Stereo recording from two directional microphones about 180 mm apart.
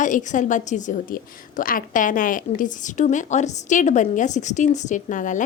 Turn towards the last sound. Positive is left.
turn(degrees=45)  # may be behind; listen again after turning